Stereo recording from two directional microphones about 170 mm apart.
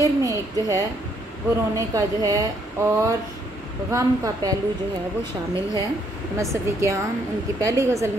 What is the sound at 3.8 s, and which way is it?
Speech, 20° right (ahead or behind).